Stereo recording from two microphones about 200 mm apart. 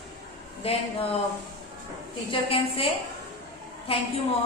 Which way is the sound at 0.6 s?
30° left (ahead or behind).